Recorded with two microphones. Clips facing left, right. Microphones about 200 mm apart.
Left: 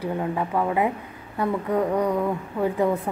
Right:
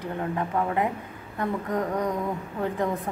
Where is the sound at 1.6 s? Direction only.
30° left (ahead or behind).